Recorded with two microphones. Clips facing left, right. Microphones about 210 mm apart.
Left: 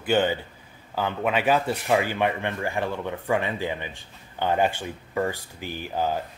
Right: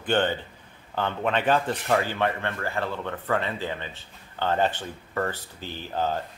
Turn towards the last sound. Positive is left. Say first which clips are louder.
# left 1 dB
turn(degrees=10)  # may be behind; listen again after turning